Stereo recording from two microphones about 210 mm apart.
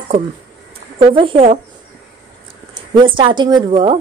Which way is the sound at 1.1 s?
25° right (ahead or behind).